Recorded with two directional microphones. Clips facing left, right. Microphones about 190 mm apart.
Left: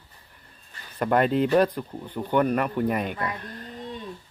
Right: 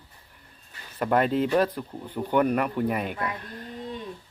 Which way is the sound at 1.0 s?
Centre (ahead or behind).